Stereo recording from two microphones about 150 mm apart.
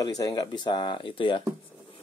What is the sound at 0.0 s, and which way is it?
Speech, 25° left (ahead or behind).